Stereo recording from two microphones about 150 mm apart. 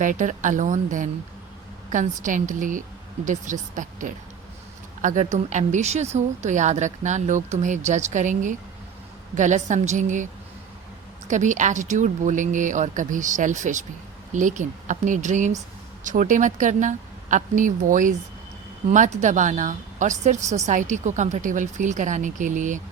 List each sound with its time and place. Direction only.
0.0 s a woman's voice: 60° right (ahead or behind)
11.3 s speech: 55° right (ahead or behind)